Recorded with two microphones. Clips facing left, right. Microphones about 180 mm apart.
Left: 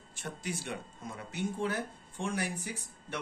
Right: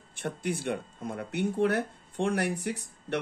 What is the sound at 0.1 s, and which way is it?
Speech, 60° right (ahead or behind).